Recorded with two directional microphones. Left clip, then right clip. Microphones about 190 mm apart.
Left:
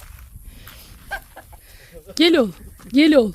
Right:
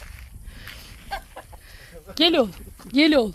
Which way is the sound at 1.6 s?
50° left (ahead or behind).